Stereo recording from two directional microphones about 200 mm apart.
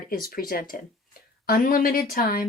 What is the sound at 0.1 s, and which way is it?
Speech, 45° left (ahead or behind).